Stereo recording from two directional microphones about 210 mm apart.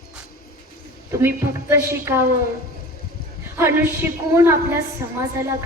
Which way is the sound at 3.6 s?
10° right (ahead or behind).